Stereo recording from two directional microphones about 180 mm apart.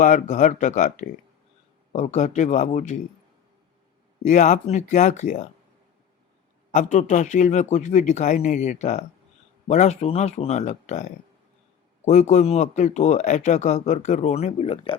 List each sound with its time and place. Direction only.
0.0 s speech: 45° left (ahead or behind)
4.2 s speech: 40° left (ahead or behind)
6.7 s speech: 45° left (ahead or behind)